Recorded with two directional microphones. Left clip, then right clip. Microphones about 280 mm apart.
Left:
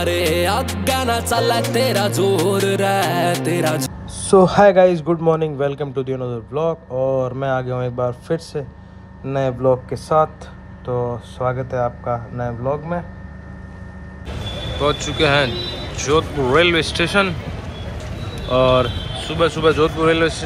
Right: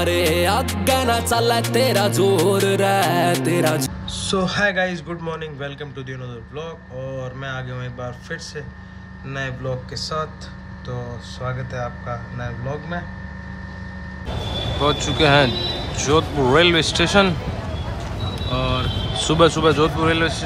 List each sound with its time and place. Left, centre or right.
0.0 s music: centre
4.1 s a man's voice: centre
12.4 s music: centre
14.8 s speech: centre
18.5 s music: centre
19.2 s speech: centre